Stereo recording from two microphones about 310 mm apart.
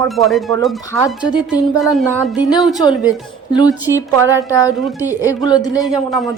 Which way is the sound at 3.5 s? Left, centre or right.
Centre.